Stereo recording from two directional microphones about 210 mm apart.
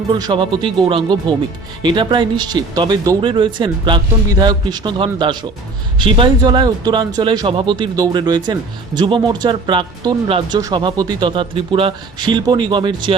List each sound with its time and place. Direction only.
0.1 s speech: 20° right (ahead or behind)